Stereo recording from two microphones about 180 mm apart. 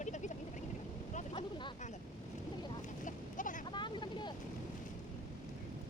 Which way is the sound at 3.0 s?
45° left (ahead or behind).